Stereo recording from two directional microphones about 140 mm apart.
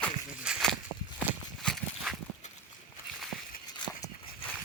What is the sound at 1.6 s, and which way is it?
Horse, centre (ahead or behind).